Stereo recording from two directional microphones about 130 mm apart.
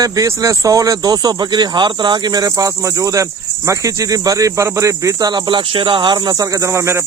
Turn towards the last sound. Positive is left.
turn(degrees=-20)  # may be behind; listen again after turning